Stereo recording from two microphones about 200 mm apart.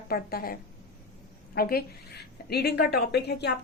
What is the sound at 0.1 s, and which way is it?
A woman's voice, 50° left (ahead or behind).